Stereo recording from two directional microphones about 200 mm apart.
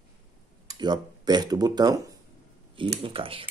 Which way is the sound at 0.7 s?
20° right (ahead or behind).